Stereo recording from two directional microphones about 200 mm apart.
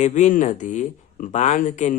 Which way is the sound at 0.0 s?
35° left (ahead or behind).